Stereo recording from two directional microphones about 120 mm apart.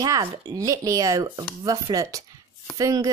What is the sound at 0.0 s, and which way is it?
A woman's voice, 30° right (ahead or behind).